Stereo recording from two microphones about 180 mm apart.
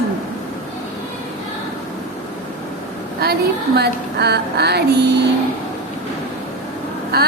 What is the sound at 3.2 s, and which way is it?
A woman's voice, 60° right (ahead or behind).